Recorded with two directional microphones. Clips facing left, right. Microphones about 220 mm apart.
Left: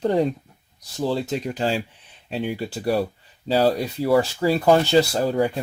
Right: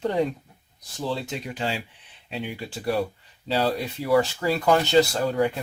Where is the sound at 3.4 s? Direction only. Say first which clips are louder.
Left 5 dB; 40° left (ahead or behind).